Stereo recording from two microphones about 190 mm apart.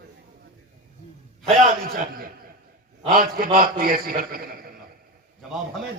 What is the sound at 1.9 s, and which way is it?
A man's voice, 50° right (ahead or behind).